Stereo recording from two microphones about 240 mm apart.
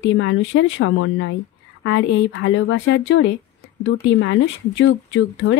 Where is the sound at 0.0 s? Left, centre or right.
Left.